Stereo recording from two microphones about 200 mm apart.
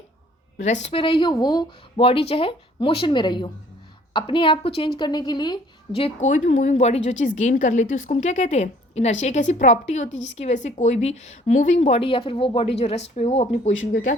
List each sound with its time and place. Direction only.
0.6 s speech: 35° left (ahead or behind)